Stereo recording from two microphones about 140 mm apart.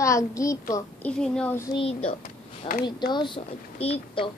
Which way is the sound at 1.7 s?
40° left (ahead or behind).